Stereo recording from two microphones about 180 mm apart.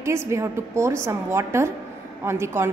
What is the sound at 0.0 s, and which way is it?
A woman's voice, 15° right (ahead or behind).